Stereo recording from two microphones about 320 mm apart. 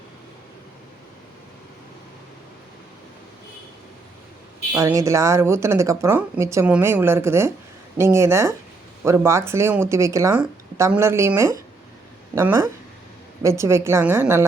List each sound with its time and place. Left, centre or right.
4.7 s speech: centre